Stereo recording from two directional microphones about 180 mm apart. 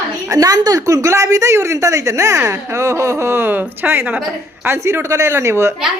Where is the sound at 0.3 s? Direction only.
20° right (ahead or behind).